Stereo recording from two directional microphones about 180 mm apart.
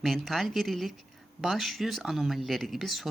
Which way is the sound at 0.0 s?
Centre (ahead or behind).